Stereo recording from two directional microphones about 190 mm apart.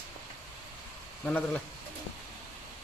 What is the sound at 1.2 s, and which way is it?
Speech, 5° left (ahead or behind).